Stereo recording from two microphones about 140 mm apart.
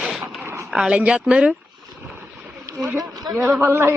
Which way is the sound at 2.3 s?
Centre (ahead or behind).